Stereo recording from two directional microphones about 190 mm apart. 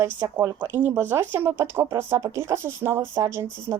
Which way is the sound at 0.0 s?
15° right (ahead or behind).